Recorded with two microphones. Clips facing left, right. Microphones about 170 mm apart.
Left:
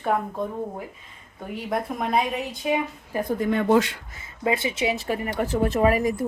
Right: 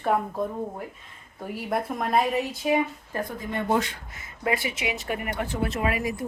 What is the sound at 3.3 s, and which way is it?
Speech, 80° left.